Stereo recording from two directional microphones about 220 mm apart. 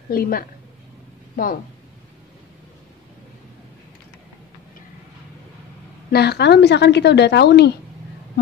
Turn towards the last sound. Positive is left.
turn(degrees=50)  # may be behind; listen again after turning